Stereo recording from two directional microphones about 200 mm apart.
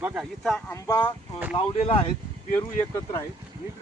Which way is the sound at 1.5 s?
30° left (ahead or behind).